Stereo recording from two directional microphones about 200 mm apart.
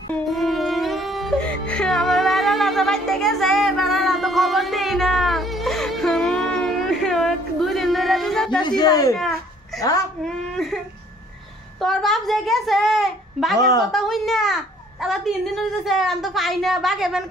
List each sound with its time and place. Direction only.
0.1 s music: centre (ahead or behind)
8.5 s speech: 20° left (ahead or behind)
9.1 s a sound: centre (ahead or behind)
9.8 s a woman's voice: 15° left (ahead or behind)
10.2 s speech: centre (ahead or behind)
11.8 s a child's voice: centre (ahead or behind)